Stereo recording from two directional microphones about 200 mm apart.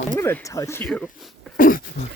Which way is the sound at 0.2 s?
10° left (ahead or behind).